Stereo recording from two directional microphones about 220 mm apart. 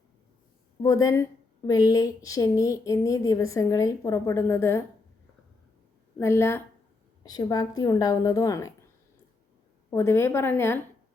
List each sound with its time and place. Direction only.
0.8 s a woman's voice: 15° left (ahead or behind)
6.1 s a woman's voice: 10° left (ahead or behind)
9.9 s a woman's voice: 10° left (ahead or behind)